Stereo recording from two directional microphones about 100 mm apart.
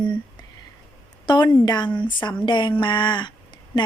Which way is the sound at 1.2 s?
50° left (ahead or behind).